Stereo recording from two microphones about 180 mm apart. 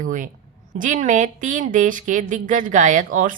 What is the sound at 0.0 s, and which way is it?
A woman's voice, 45° right (ahead or behind).